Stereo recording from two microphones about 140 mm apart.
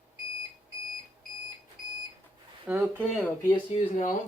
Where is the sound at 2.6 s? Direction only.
10° right (ahead or behind).